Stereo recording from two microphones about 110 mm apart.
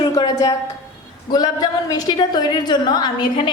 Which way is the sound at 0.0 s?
40° left (ahead or behind).